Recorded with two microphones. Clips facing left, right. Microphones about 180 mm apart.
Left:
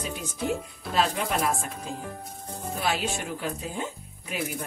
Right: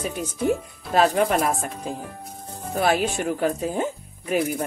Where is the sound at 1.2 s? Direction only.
45° right (ahead or behind).